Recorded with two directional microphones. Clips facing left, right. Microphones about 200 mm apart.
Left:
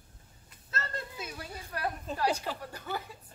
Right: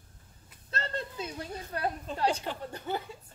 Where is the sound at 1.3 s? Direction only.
25° right (ahead or behind).